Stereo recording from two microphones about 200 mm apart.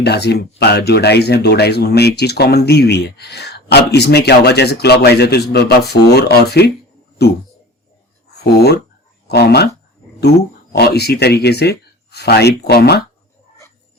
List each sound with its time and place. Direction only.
0.0 s speech: 55° left (ahead or behind)
9.2 s speech: 55° left (ahead or behind)